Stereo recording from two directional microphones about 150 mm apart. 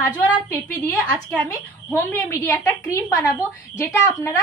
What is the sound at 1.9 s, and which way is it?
A woman's voice, 15° left (ahead or behind).